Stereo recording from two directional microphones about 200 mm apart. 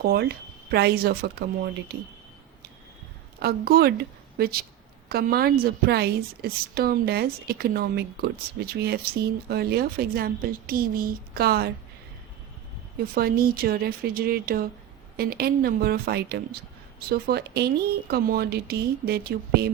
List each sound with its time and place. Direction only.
0.0 s a woman's voice: 50° right (ahead or behind)
3.4 s a woman's voice: 50° right (ahead or behind)
13.1 s a woman's voice: 50° right (ahead or behind)